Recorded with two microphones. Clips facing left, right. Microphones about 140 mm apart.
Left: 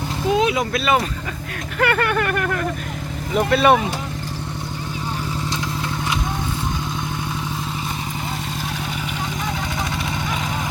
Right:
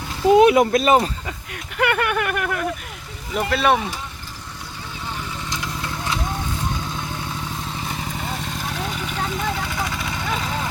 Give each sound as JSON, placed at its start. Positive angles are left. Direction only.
{"t": 0.3, "sound": "speech", "side_deg": -55}
{"t": 1.8, "sound": "speech", "side_deg": -15}
{"t": 9.9, "sound": "vehicle", "side_deg": 25}